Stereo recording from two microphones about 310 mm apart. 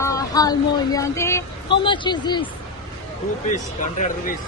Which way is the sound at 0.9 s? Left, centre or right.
Centre.